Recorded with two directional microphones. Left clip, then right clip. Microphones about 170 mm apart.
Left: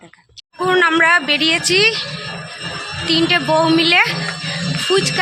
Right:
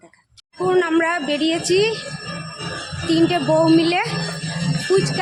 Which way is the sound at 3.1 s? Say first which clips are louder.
Left 2 dB; 35° right (ahead or behind).